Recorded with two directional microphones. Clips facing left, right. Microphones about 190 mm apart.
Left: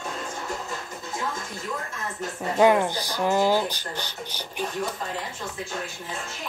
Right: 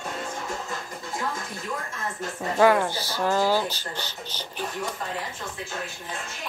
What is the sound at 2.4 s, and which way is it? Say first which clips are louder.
Speech: left 1 dB; 20° left (ahead or behind).